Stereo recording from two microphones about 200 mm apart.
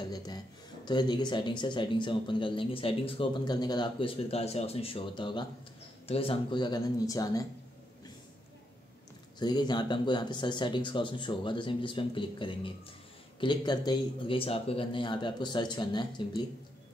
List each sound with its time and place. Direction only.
0.1 s speech: 20° left (ahead or behind)
9.4 s speech: 20° left (ahead or behind)